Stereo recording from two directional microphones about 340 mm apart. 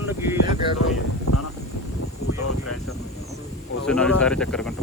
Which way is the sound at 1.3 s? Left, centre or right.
Left.